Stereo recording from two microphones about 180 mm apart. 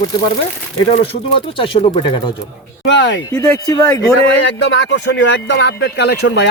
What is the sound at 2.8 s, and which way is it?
Speech, 80° left.